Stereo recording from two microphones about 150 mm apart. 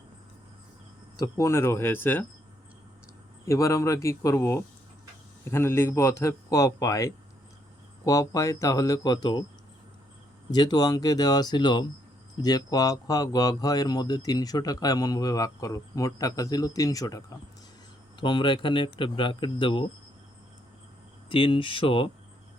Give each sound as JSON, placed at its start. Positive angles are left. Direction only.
{"t": 1.2, "sound": "speech", "side_deg": 20}
{"t": 3.4, "sound": "speech", "side_deg": 20}
{"t": 10.5, "sound": "speech", "side_deg": 25}
{"t": 21.2, "sound": "speech", "side_deg": 35}